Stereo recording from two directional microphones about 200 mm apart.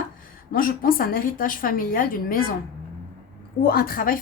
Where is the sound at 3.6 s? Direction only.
50° left (ahead or behind).